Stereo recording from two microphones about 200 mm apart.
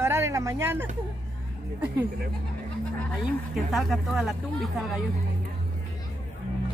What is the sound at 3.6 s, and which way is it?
Speech, centre (ahead or behind).